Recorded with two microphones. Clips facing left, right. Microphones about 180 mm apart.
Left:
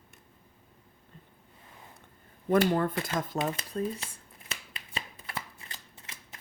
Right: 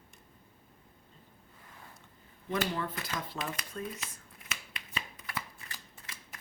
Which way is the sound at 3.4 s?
25° left (ahead or behind).